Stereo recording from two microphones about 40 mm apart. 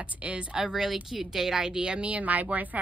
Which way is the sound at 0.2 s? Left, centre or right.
Right.